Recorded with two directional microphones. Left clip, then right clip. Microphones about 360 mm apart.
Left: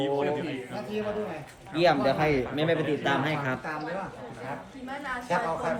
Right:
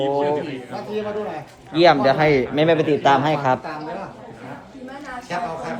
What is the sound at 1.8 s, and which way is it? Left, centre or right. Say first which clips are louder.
Speech: right 9 dB; right.